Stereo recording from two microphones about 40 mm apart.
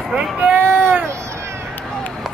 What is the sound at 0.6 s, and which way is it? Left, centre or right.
Baby cry, right.